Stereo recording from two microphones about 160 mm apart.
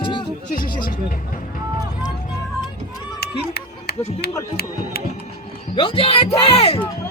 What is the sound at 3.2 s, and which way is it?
Run, 80° left.